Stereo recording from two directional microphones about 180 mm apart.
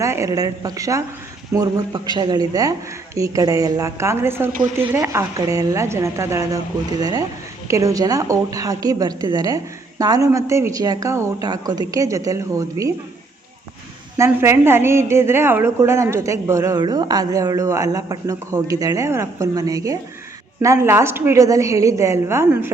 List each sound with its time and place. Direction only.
0.0 s a woman's voice: 15° right (ahead or behind)
14.2 s a woman's voice: 15° right (ahead or behind)